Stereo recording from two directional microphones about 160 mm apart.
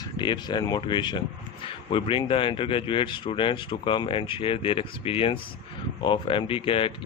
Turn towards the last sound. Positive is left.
turn(degrees=35)  # may be behind; listen again after turning